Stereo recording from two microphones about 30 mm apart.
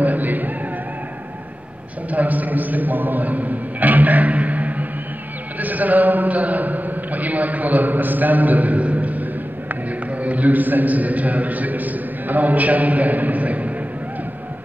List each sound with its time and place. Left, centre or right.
0.0 s a sound: right
2.0 s a man's voice: right
10.2 s a man's voice: right